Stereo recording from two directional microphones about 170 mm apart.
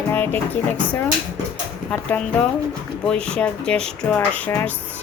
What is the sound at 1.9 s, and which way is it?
A woman's voice, 10° left (ahead or behind).